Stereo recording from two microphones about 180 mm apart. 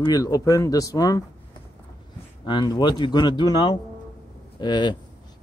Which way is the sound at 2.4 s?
25° left (ahead or behind).